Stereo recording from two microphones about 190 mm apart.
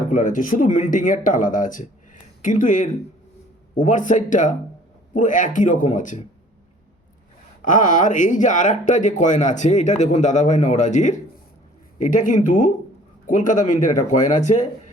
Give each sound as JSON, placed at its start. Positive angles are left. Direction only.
{"t": 0.1, "sound": "speech", "side_deg": 40}
{"t": 7.6, "sound": "speech", "side_deg": 45}